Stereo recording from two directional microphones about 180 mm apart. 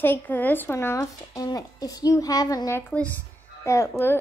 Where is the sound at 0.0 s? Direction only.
10° left (ahead or behind).